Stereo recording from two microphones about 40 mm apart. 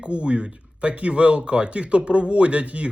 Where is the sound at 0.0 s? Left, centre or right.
Right.